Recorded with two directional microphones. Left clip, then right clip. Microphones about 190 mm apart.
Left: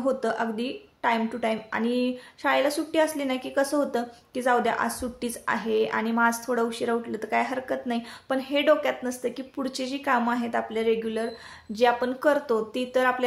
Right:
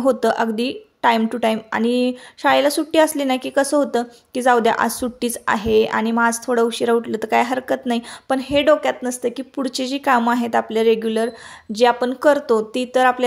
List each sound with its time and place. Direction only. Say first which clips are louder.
0.0 s speech: right 9 dB; 45° right (ahead or behind)